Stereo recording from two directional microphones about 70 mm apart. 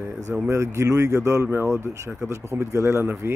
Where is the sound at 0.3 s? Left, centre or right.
Right.